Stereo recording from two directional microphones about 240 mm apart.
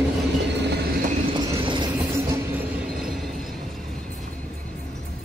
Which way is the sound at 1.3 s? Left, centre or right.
Centre.